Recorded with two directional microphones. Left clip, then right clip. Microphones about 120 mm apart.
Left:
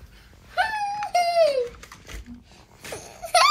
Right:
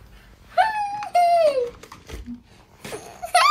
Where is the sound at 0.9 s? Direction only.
55° right (ahead or behind).